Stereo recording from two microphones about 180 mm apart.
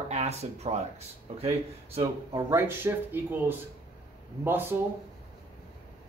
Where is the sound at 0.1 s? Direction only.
35° right (ahead or behind).